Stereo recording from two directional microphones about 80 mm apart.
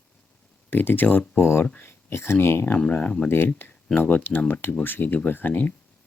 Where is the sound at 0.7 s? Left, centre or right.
Left.